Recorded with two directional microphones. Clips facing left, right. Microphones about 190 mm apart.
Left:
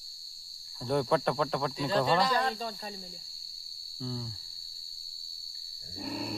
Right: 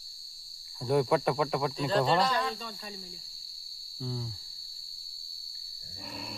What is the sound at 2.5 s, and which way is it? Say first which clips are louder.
Speech: left 3 dB; 40° left (ahead or behind).